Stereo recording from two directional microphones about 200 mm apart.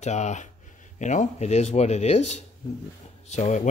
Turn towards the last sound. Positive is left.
turn(degrees=35)  # may be behind; listen again after turning